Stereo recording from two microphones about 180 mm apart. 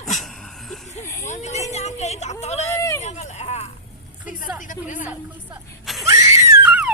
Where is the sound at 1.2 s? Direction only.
40° left (ahead or behind).